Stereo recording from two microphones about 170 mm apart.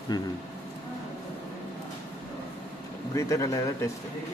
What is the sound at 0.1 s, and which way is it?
Speech, 20° left (ahead or behind).